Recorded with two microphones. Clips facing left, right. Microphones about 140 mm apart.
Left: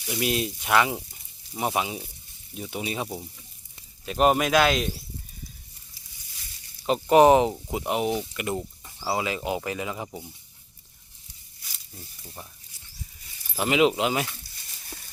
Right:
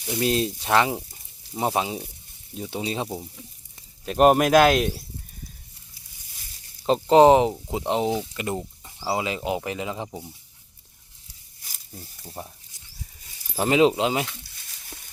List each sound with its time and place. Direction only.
0.1 s speech: 35° right (ahead or behind)
1.1 s sizzle: 30° right (ahead or behind)
2.6 s speech: 30° right (ahead or behind)
4.0 s speech: 45° right (ahead or behind)
6.8 s speech: 30° right (ahead or behind)
8.4 s a sound: 25° right (ahead or behind)
9.0 s speech: 20° right (ahead or behind)
12.2 s speech: 35° right (ahead or behind)
13.6 s speech: 30° right (ahead or behind)